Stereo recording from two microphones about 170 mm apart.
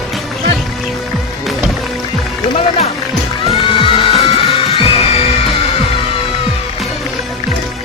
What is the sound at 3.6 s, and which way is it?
Music, 30° left (ahead or behind).